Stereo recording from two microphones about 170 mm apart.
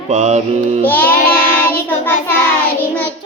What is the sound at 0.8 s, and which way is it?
Child singing, 10° left (ahead or behind).